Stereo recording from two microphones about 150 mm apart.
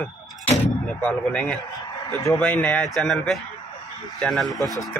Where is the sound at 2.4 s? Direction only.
5° left (ahead or behind).